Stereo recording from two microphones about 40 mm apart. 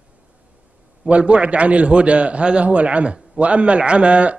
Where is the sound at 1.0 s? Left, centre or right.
Right.